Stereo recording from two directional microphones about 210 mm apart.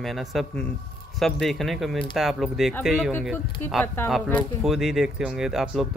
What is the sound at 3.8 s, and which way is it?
Speech, 10° left (ahead or behind).